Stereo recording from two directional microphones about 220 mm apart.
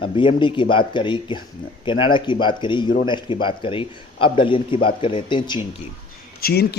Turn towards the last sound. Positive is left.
turn(degrees=45)  # may be behind; listen again after turning